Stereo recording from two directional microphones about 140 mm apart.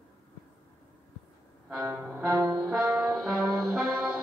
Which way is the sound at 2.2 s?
25° right (ahead or behind).